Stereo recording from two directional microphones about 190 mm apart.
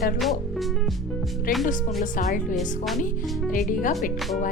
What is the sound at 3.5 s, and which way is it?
Speech, 45° left (ahead or behind).